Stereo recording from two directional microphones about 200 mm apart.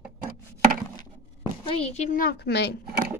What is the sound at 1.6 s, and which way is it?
A woman's voice, 30° left (ahead or behind).